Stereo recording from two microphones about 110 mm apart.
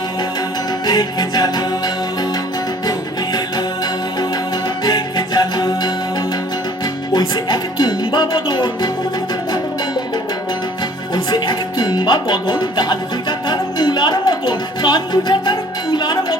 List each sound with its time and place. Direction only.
0.9 s music: 35° left (ahead or behind)
4.9 s music: 35° left (ahead or behind)
7.1 s music: 40° left (ahead or behind)
11.1 s music: 45° left (ahead or behind)
13.5 s speech: 40° left (ahead or behind)
14.8 s music: 40° left (ahead or behind)